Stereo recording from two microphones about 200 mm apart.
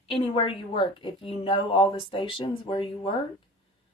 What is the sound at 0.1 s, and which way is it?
Speech, 25° left (ahead or behind).